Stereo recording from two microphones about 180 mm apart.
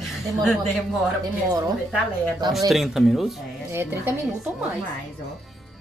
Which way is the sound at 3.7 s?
15° right (ahead or behind).